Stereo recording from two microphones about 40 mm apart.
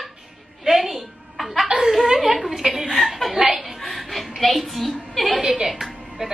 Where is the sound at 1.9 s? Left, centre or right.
Centre.